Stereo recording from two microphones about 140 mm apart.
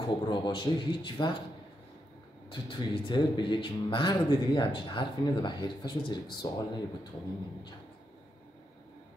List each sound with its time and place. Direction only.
0.0 s speech: 30° left (ahead or behind)
2.5 s speech: 35° left (ahead or behind)